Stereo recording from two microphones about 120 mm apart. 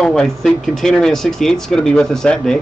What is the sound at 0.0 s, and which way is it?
Speech, 5° left (ahead or behind).